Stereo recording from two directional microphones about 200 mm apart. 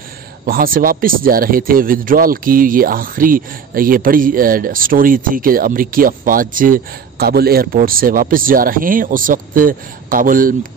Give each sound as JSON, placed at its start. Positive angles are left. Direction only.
{"t": 0.5, "sound": "a man's voice", "side_deg": -45}